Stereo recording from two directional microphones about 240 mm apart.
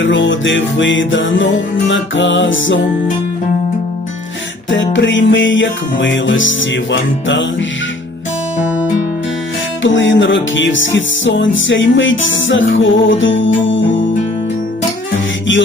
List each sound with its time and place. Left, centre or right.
0.0 s music: left
4.9 s music: left
8.5 s music: centre
9.8 s music: left